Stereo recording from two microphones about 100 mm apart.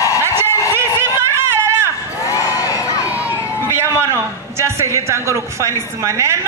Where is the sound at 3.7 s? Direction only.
25° right (ahead or behind).